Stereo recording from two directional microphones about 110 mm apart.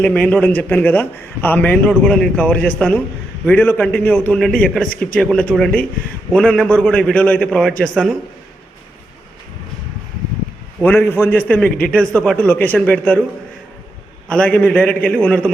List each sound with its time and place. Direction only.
0.0 s a man's voice: 15° left (ahead or behind)
10.8 s a man's voice: 20° left (ahead or behind)
14.3 s a man's voice: 10° left (ahead or behind)